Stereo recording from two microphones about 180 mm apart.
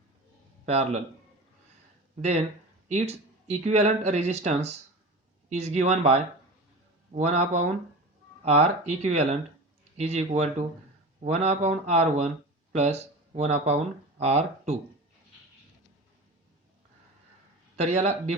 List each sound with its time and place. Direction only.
2.9 s speech: 35° right (ahead or behind)
17.7 s speech: 35° right (ahead or behind)